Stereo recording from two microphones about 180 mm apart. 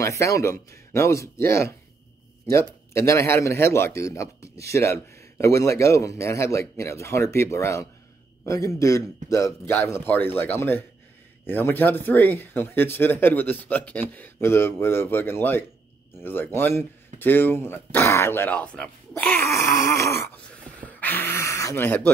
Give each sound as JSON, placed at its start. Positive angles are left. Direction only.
{"t": 0.0, "sound": "a man's voice", "side_deg": 15}